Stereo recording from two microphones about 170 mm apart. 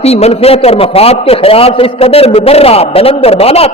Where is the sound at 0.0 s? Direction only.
40° left (ahead or behind).